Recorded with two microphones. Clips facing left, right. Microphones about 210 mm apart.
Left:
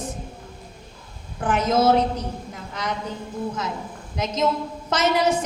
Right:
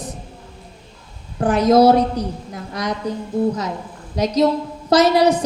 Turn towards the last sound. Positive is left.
turn(degrees=-35)  # may be behind; listen again after turning